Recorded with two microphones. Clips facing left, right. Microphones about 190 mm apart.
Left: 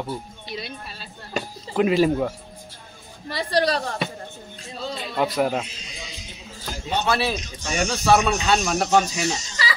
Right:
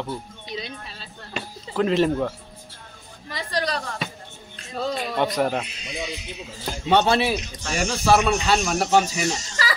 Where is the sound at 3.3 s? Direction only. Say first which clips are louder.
Left 5 dB; 30° left (ahead or behind).